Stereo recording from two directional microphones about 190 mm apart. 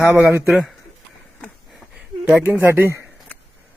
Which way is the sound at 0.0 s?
5° right (ahead or behind).